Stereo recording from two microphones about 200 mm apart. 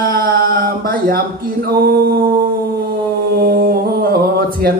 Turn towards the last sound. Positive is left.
turn(degrees=-50)  # may be behind; listen again after turning